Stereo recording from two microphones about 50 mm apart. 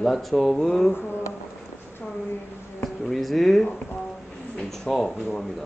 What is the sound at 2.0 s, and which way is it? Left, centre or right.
Speech, centre.